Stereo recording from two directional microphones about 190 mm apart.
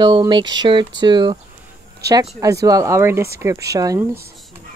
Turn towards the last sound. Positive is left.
turn(degrees=-20)  # may be behind; listen again after turning